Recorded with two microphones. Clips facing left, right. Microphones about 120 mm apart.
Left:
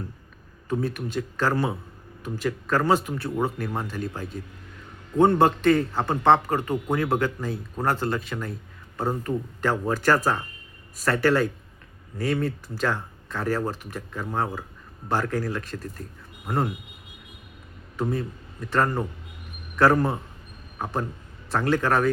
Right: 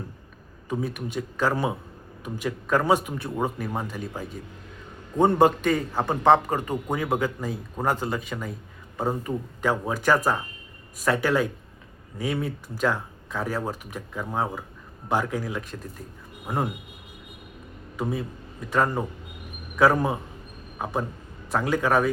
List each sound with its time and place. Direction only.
0.7 s speech: 10° right (ahead or behind)
17.9 s a man's voice: 10° right (ahead or behind)
21.5 s speech: 10° right (ahead or behind)